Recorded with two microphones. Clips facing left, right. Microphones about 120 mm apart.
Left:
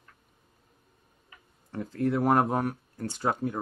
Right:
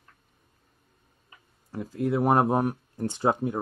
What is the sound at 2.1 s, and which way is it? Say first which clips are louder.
Speech: right 3 dB; 25° right (ahead or behind).